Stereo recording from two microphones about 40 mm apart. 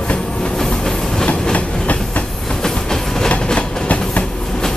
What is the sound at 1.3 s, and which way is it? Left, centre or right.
Train, left.